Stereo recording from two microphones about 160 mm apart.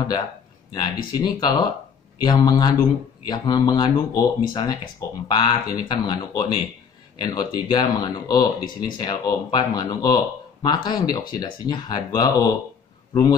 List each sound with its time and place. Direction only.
0.7 s speech: 30° left (ahead or behind)